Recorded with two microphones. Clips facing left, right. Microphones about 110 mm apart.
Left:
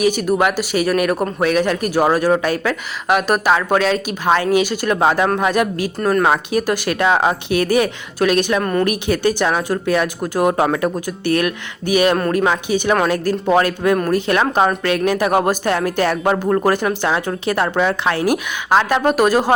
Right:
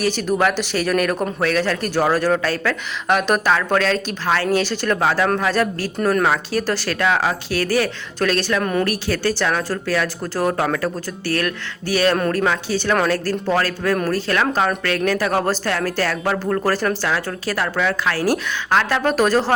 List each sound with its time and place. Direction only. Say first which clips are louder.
0.0 s speech: left 3 dB; 10° left (ahead or behind)